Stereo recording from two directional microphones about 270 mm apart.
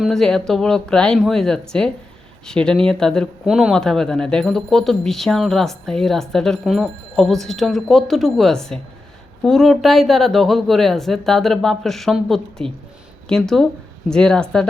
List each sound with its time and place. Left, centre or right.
0.0 s speech: centre